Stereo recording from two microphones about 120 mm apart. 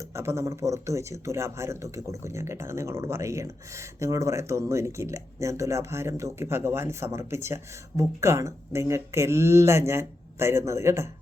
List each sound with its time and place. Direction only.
0.0 s speech: 25° right (ahead or behind)